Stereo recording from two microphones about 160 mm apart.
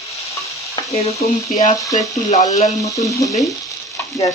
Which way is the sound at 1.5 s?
40° left (ahead or behind).